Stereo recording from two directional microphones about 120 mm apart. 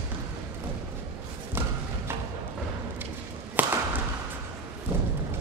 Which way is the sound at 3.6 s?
15° right (ahead or behind).